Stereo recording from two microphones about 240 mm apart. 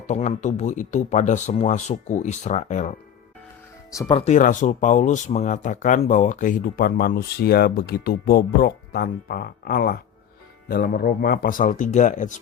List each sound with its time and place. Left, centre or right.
0.1 s speech: left
3.9 s speech: centre
4.2 s speech: left